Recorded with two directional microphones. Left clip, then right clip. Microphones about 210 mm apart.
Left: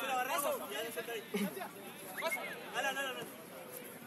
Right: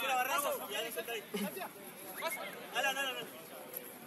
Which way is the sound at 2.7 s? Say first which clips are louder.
Right 3 dB; 35° right (ahead or behind).